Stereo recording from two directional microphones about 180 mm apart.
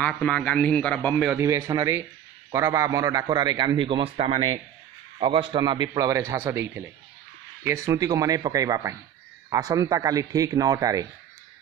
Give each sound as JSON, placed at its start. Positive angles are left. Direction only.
{"t": 0.0, "sound": "a man's voice", "side_deg": 5}
{"t": 1.3, "sound": "a man's voice", "side_deg": -15}